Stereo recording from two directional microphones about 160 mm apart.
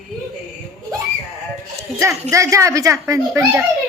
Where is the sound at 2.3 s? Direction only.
20° right (ahead or behind).